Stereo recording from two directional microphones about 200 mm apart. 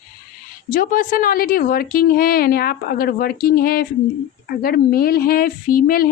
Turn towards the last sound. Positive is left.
turn(degrees=45)  # may be behind; listen again after turning